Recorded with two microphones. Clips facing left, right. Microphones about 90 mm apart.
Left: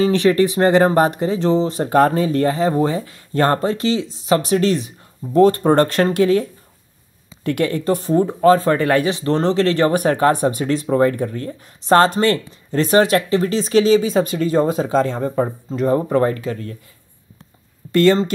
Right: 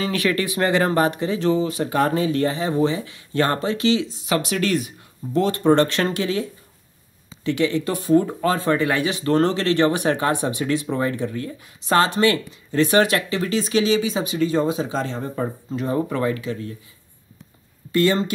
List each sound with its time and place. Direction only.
0.0 s speech: 30° left (ahead or behind)
5.3 s speech: 45° left (ahead or behind)
7.4 s speech: 50° left (ahead or behind)
7.8 s speech: 35° left (ahead or behind)